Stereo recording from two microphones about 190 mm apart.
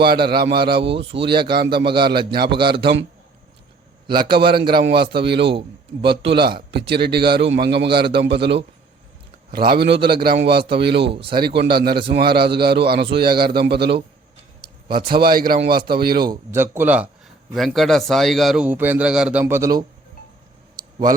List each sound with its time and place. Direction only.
0.0 s a man's voice: 55° right (ahead or behind)
2.8 s a man's voice: 75° right (ahead or behind)
4.0 s a man's voice: 25° right (ahead or behind)
4.3 s a man's voice: 55° right (ahead or behind)
9.6 s a man's voice: 60° right (ahead or behind)
11.1 s speech: 30° right (ahead or behind)
11.3 s a man's voice: 60° right (ahead or behind)
16.2 s a man's voice: 15° right (ahead or behind)
20.8 s a sound: 20° right (ahead or behind)